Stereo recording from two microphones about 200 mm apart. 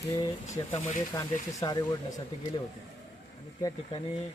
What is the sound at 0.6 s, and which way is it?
Speech, 20° left (ahead or behind).